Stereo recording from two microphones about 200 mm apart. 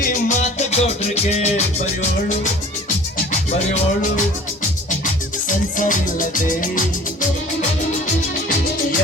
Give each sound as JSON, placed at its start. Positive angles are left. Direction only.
{"t": 0.0, "sound": "music", "side_deg": 40}
{"t": 5.5, "sound": "music", "side_deg": 40}